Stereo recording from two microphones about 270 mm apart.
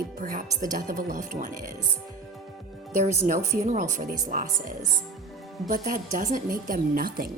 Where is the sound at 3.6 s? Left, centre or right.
Right.